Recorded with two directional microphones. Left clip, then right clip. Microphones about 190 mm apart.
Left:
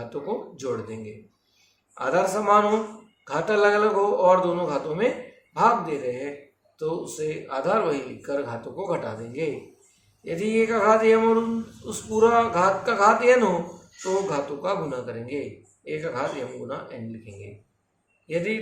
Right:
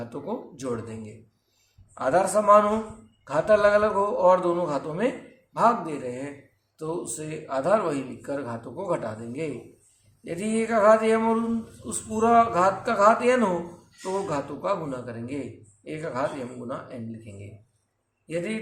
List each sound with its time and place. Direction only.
0.1 s speech: 25° right (ahead or behind)
2.0 s speech: 25° right (ahead or behind)
18.3 s speech: 25° right (ahead or behind)